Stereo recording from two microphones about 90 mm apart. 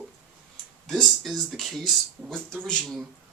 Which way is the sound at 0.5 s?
5° left (ahead or behind).